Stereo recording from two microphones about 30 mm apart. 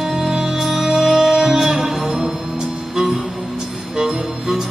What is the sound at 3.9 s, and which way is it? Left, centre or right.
Music, centre.